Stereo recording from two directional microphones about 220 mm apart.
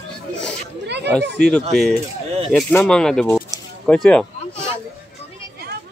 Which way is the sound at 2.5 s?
5° left (ahead or behind).